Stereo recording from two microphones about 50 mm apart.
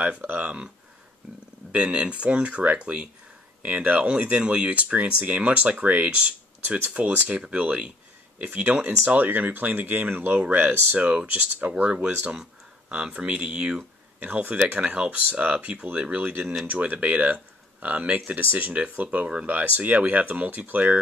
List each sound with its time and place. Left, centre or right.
0.0 s speech: right
1.7 s speech: right
3.6 s speech: right
9.2 s speech: right
11.1 s speech: right
14.3 s speech: right